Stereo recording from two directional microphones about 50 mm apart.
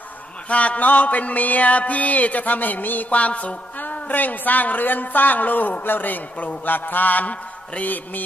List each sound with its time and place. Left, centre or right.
0.5 s music: left